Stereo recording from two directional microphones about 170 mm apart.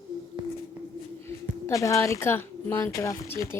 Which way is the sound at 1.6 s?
20° left (ahead or behind).